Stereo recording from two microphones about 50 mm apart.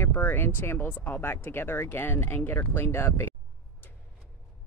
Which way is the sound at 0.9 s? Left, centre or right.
Left.